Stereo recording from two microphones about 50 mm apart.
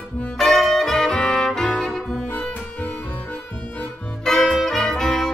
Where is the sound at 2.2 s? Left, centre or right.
Left.